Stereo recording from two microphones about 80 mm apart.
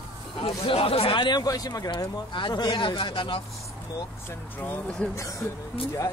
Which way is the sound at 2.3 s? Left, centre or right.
Left.